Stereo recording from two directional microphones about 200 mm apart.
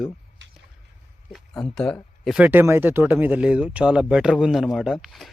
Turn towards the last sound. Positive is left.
turn(degrees=0)  # may be behind; listen again after turning